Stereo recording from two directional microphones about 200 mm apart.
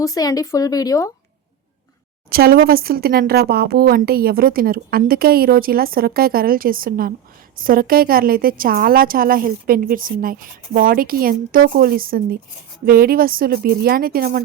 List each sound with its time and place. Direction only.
0.0 s speech: 15° left (ahead or behind)
2.3 s a woman's voice: 50° right (ahead or behind)